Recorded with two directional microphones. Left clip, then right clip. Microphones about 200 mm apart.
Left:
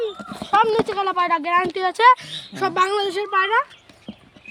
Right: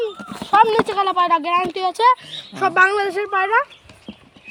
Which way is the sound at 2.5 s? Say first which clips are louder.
Right 4 dB; 20° left (ahead or behind).